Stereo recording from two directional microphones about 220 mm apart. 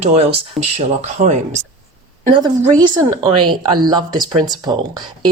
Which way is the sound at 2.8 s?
20° right (ahead or behind).